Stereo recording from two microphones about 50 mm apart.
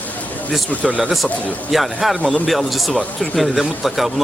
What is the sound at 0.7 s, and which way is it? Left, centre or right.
Speech, left.